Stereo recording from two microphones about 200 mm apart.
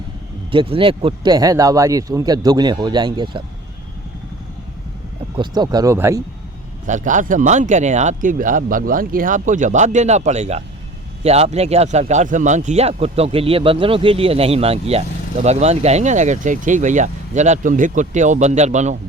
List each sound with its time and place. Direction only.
0.5 s speech: 25° right (ahead or behind)
5.4 s speech: 20° right (ahead or behind)
6.8 s speech: 40° right (ahead or behind)